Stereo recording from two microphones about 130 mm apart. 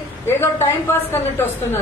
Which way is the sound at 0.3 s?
20° left (ahead or behind).